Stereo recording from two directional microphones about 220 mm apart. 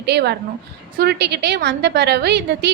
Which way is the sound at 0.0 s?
50° right (ahead or behind).